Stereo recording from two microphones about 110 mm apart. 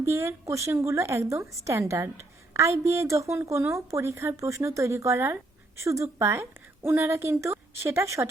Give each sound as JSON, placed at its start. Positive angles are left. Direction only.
{"t": 0.0, "sound": "a woman's voice", "side_deg": -25}